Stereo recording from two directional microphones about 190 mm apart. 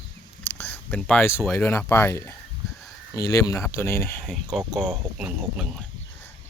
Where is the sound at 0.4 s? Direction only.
10° left (ahead or behind).